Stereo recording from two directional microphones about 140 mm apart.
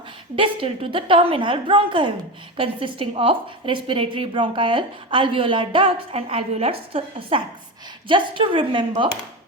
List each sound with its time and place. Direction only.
0.3 s a woman's voice: 40° right (ahead or behind)